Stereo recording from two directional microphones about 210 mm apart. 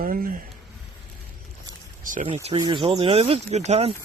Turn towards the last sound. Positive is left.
turn(degrees=-30)  # may be behind; listen again after turning